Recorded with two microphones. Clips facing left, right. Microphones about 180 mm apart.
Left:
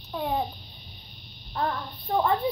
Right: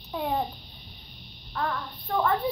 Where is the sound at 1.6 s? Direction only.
25° left (ahead or behind).